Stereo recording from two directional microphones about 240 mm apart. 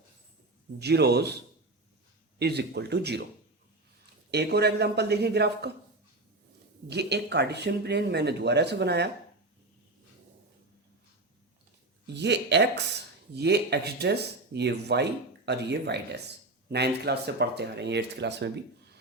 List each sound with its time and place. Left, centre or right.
0.8 s speech: right
2.4 s speech: right
4.3 s speech: right
6.8 s speech: right
12.0 s speech: right